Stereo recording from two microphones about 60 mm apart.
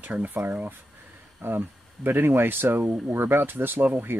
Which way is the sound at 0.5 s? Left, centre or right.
Right.